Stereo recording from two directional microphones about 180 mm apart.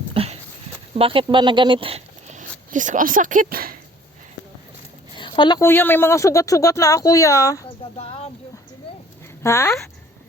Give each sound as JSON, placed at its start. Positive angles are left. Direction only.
{"t": 0.1, "sound": "a sound", "side_deg": -30}
{"t": 0.9, "sound": "speech", "side_deg": -30}
{"t": 5.1, "sound": "a sound", "side_deg": 25}
{"t": 5.6, "sound": "speech", "side_deg": 10}
{"t": 7.9, "sound": "speech", "side_deg": 35}
{"t": 9.4, "sound": "speech", "side_deg": 15}